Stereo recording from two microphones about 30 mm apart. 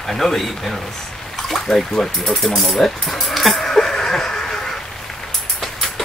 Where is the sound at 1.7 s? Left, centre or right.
Centre.